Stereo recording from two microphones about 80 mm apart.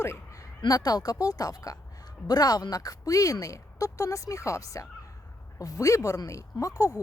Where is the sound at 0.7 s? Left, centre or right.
Left.